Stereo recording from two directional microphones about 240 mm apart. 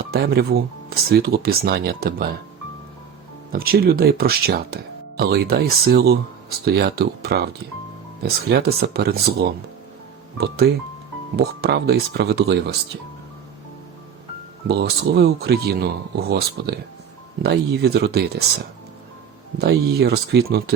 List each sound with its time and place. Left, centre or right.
0.1 s speech: right
3.5 s speech: right
14.7 s speech: right
19.5 s speech: right